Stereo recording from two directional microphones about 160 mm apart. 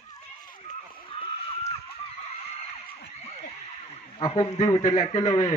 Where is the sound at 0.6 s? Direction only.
35° left (ahead or behind).